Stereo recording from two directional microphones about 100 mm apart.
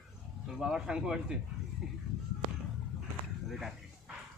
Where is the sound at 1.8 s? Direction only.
10° right (ahead or behind).